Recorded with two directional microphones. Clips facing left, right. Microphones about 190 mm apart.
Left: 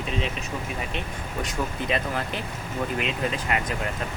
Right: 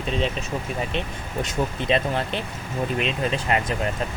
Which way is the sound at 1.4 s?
25° right (ahead or behind).